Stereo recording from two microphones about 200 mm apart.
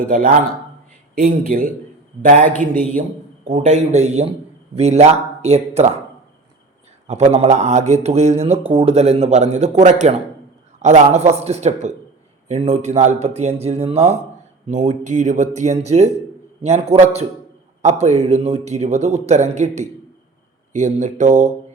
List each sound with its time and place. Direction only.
0.0 s speech: 45° right (ahead or behind)
3.5 s a man's voice: 40° right (ahead or behind)
7.1 s a man's voice: 30° right (ahead or behind)